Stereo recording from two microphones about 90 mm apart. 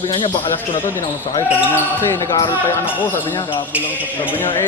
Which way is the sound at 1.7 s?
20° left (ahead or behind).